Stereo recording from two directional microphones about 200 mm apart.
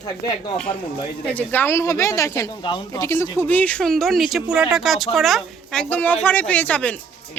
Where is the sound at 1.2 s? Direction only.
10° left (ahead or behind).